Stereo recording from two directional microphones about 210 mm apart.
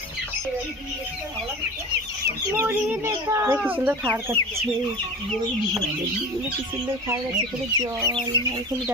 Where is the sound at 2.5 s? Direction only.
10° right (ahead or behind).